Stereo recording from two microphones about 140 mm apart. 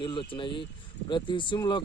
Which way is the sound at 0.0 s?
35° left (ahead or behind).